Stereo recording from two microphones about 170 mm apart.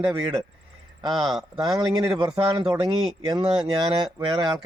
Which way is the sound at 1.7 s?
25° right (ahead or behind).